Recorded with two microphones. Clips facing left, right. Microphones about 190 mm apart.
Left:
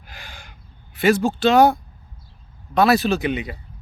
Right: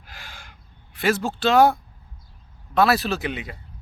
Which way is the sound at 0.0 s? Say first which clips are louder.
Left 2 dB; centre (ahead or behind).